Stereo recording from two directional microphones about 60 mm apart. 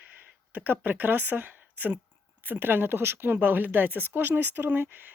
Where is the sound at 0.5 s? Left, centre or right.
Right.